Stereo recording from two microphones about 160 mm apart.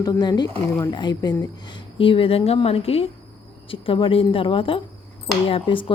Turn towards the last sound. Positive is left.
turn(degrees=30)  # may be behind; listen again after turning